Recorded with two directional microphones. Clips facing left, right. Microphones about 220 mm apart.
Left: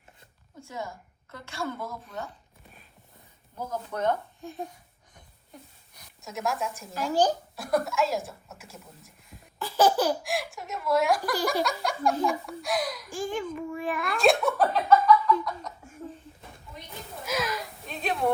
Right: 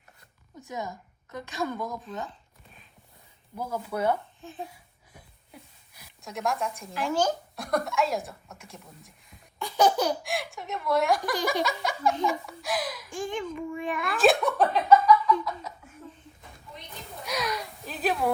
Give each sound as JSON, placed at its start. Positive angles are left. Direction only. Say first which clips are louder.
{"t": 0.6, "sound": "a woman's voice", "louder": "right 2 dB", "side_deg": -20}
{"t": 3.6, "sound": "speech", "louder": "right 1 dB", "side_deg": -10}
{"t": 4.4, "sound": "a woman's voice", "louder": "left 3 dB", "side_deg": 15}
{"t": 5.9, "sound": "a sound", "louder": "even", "side_deg": 0}
{"t": 6.9, "sound": "speech", "louder": "left 2 dB", "side_deg": 35}
{"t": 7.5, "sound": "a child's voice", "louder": "left 1 dB", "side_deg": 0}
{"t": 17.2, "sound": "a sound", "louder": "left 1 dB", "side_deg": 0}